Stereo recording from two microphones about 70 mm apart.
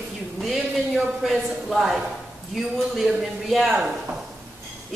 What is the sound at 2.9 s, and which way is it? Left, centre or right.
Speech, centre.